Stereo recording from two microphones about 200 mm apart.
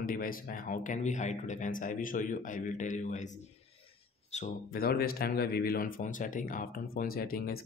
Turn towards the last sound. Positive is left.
turn(degrees=50)  # may be behind; listen again after turning